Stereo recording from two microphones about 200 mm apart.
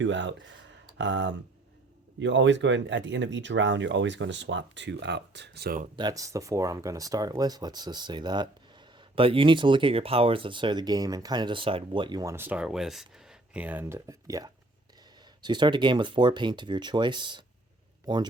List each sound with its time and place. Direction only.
0.0 s speech: 65° right (ahead or behind)
6.0 s speech: 20° right (ahead or behind)